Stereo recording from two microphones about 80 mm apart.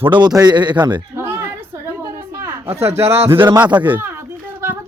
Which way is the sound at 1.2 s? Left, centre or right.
Right.